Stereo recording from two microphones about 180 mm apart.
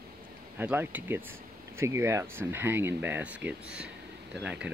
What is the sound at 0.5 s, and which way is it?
Speech, 10° right (ahead or behind).